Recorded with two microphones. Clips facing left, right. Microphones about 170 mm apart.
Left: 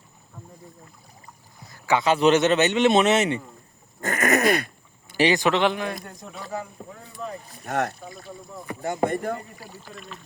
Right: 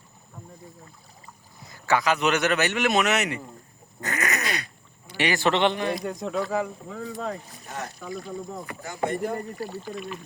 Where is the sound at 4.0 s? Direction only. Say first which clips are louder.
Left 7 dB; 50° left (ahead or behind).